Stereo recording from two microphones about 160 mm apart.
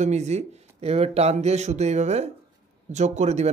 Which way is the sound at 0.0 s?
45° right (ahead or behind).